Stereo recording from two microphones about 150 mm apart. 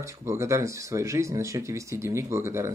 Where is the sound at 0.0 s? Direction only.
15° right (ahead or behind).